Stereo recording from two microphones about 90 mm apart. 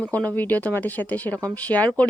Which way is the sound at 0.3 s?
20° left (ahead or behind).